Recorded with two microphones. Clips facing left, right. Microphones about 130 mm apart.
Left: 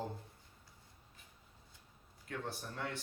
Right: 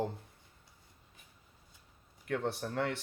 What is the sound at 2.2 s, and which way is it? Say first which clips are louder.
Speech: right 9 dB; 70° right (ahead or behind).